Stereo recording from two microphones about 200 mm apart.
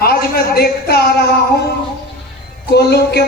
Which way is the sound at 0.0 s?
50° left (ahead or behind).